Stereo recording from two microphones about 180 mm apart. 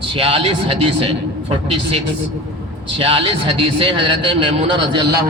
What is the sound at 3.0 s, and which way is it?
A man's voice, 30° right (ahead or behind).